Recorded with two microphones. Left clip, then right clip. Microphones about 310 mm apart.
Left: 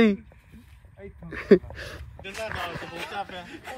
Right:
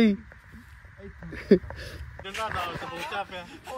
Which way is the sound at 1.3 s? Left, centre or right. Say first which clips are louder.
Left 3 dB; centre.